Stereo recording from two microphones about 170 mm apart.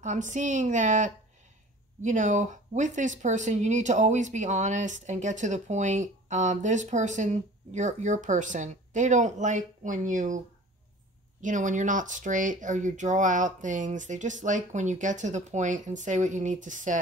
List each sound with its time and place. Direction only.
0.0 s speech: 45° right (ahead or behind)
11.4 s speech: 50° right (ahead or behind)